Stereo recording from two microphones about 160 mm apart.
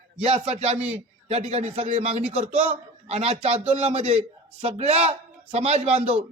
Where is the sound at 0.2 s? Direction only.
35° right (ahead or behind).